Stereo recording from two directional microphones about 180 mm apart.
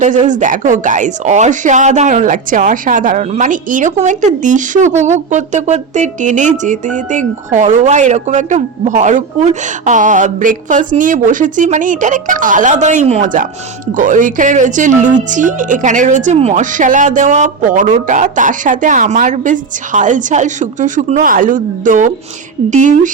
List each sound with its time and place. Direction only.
0.0 s speech: 45° right (ahead or behind)